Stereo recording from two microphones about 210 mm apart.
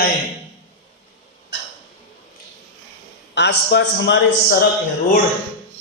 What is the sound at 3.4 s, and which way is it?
A man's voice, 55° left (ahead or behind).